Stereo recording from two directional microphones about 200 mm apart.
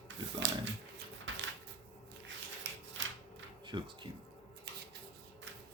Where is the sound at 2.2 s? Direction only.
65° right (ahead or behind).